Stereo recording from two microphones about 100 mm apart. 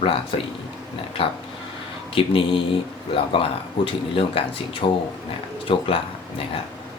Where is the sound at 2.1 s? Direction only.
60° left (ahead or behind).